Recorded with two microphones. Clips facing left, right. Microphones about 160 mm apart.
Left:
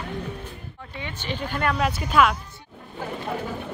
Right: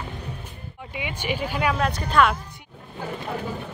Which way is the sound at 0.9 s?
10° right (ahead or behind).